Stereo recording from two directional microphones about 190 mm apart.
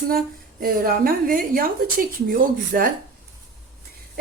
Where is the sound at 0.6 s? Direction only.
50° right (ahead or behind).